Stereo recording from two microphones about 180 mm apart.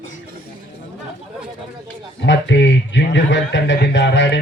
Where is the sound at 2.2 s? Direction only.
90° left.